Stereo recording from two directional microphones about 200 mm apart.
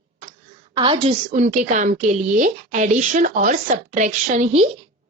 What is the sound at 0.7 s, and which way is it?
A woman's voice, 25° right (ahead or behind).